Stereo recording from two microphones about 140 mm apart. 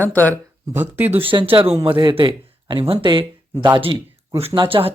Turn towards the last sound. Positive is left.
turn(degrees=-40)  # may be behind; listen again after turning